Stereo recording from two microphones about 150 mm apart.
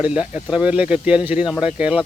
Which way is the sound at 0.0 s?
5° right (ahead or behind).